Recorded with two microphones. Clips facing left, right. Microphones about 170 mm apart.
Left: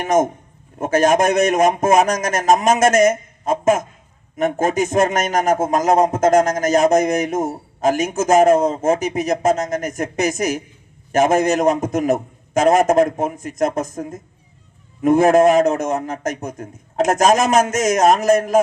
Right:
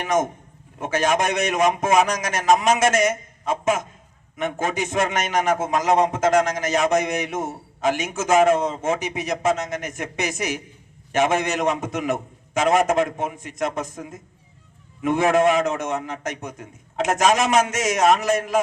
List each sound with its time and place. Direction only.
0.0 s a man's voice: 45° left (ahead or behind)